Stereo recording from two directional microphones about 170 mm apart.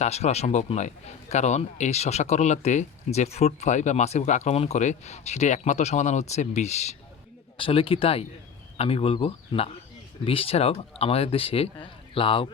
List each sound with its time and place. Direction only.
0.0 s speech: 40° left (ahead or behind)